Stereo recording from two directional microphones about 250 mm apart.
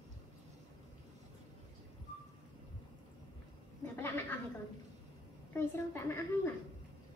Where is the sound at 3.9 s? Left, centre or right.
Centre.